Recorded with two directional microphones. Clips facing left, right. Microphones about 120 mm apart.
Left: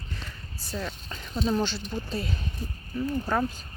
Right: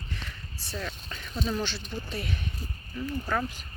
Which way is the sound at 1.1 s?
25° left (ahead or behind).